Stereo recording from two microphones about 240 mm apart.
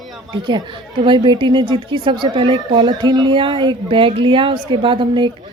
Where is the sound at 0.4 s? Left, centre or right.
Centre.